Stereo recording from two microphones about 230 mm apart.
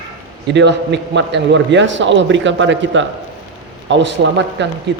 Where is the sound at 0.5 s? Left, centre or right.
Right.